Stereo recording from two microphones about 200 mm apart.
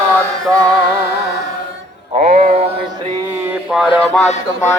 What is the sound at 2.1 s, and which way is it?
Music, 35° right (ahead or behind).